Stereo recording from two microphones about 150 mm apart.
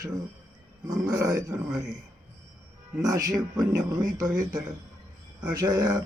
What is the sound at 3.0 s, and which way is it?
Speech, 25° right (ahead or behind).